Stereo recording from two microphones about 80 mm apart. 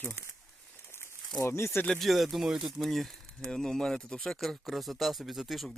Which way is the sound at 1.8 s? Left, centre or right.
Centre.